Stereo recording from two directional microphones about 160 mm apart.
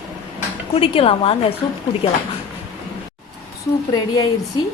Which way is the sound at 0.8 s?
35° left (ahead or behind).